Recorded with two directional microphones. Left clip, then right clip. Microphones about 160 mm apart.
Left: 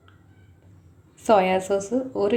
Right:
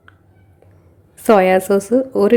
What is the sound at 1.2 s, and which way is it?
A woman's voice, 55° right (ahead or behind).